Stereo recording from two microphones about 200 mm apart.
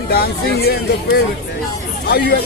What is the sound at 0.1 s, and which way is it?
Speech, 50° left (ahead or behind).